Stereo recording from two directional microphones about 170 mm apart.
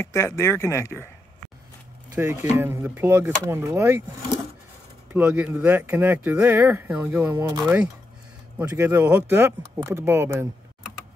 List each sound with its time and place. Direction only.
0.0 s speech: 15° left (ahead or behind)
2.1 s speech: 20° right (ahead or behind)
5.1 s speech: 10° right (ahead or behind)